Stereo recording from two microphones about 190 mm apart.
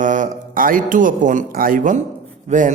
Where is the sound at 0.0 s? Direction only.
40° right (ahead or behind).